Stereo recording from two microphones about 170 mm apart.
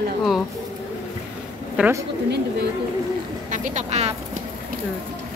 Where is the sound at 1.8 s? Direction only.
10° right (ahead or behind).